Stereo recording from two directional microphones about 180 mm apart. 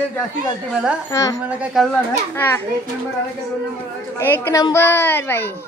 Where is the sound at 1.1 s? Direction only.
20° left (ahead or behind).